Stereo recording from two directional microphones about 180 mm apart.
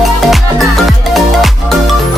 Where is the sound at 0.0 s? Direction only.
Centre (ahead or behind).